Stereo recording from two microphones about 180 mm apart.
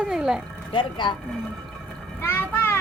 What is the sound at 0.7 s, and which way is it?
Speech, 25° left (ahead or behind).